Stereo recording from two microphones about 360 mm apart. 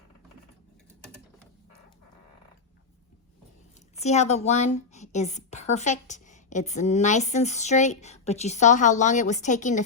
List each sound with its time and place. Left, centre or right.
3.9 s a woman's voice: centre